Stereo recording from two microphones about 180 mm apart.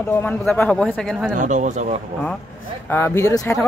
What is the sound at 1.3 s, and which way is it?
Speech, 45° right (ahead or behind).